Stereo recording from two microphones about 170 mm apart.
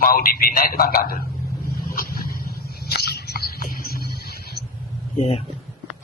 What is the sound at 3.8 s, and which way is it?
Music, 65° left (ahead or behind).